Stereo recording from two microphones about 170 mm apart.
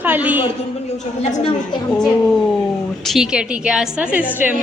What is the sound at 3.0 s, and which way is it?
A woman's voice, 5° right (ahead or behind).